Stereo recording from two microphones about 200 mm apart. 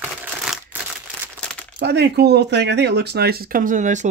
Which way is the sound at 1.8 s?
55° right (ahead or behind).